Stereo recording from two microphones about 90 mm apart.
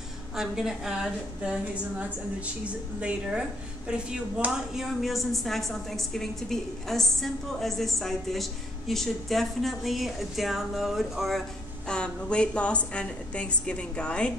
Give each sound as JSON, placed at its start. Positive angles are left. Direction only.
{"t": 0.4, "sound": "a woman's voice", "side_deg": -5}
{"t": 11.9, "sound": "a woman's voice", "side_deg": 10}